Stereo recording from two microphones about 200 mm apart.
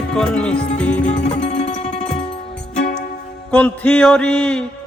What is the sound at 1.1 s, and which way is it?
Music, 35° left (ahead or behind).